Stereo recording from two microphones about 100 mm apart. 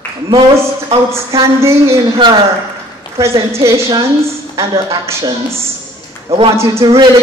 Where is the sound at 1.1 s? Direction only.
30° right (ahead or behind).